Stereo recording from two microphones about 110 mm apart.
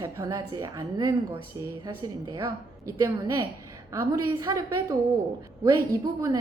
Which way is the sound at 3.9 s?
25° right (ahead or behind).